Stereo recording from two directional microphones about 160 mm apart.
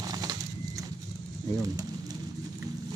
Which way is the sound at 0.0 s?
25° right (ahead or behind).